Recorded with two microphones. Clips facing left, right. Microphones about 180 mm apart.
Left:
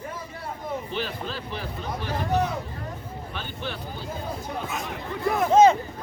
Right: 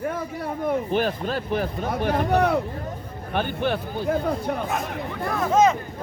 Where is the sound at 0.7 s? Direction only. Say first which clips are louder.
Right 8 dB; 50° right (ahead or behind).